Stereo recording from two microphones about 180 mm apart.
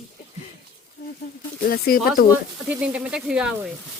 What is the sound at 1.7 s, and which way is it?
Speech, 60° left (ahead or behind).